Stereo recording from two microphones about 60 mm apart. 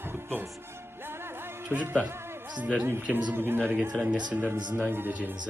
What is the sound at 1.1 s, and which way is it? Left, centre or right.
Music, right.